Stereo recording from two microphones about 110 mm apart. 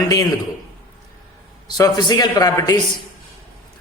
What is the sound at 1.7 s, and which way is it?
A man's voice, 35° left (ahead or behind).